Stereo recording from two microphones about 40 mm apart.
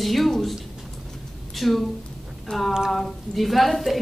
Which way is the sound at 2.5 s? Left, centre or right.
Left.